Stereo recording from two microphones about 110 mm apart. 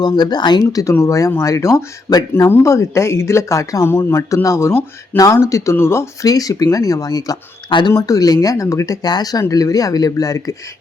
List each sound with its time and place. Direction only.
0.0 s speech: 40° left (ahead or behind)
7.7 s speech: 45° left (ahead or behind)
7.9 s speech: 30° left (ahead or behind)